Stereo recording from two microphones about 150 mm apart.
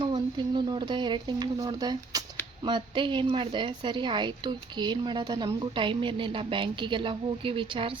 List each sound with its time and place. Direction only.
0.0 s speech: 30° right (ahead or behind)